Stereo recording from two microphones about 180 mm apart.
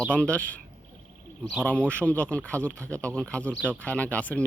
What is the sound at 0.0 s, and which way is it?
Speech, 5° left (ahead or behind).